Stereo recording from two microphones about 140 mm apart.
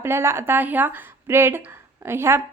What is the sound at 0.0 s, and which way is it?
Speech, 15° right (ahead or behind).